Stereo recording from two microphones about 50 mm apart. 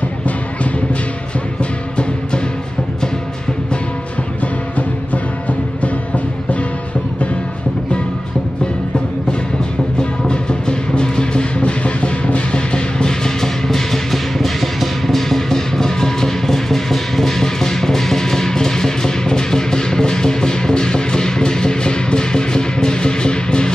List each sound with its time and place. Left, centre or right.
1.6 s music: left
9.9 s music: centre